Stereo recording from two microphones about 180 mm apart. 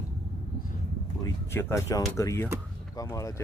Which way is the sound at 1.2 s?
15° left (ahead or behind).